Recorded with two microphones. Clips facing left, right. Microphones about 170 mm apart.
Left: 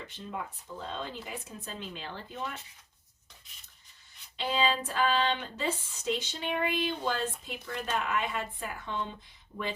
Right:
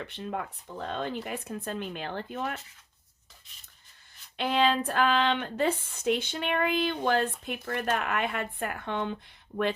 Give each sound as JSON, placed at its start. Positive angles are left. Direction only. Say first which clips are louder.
{"t": 0.0, "sound": "speech", "louder": "right 5 dB", "side_deg": -65}
{"t": 4.4, "sound": "speech", "louder": "right 4 dB", "side_deg": -60}
{"t": 9.5, "sound": "speech", "louder": "right 8 dB", "side_deg": -55}